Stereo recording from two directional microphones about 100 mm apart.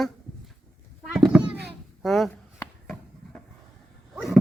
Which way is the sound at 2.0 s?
Centre (ahead or behind).